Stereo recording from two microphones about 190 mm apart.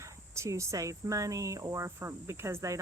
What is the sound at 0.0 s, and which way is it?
Speech, 15° right (ahead or behind).